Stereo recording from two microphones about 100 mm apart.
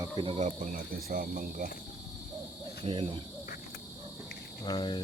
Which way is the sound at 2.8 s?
60° right (ahead or behind).